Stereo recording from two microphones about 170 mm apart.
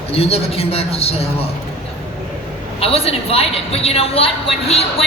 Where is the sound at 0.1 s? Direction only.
35° left (ahead or behind).